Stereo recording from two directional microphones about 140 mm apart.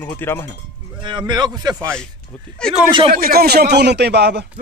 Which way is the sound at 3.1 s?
90° right.